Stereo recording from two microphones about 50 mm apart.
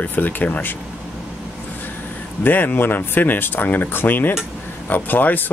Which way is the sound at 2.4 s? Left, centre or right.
Left.